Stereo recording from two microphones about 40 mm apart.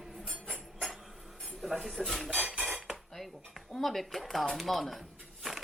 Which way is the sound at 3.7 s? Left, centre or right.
Centre.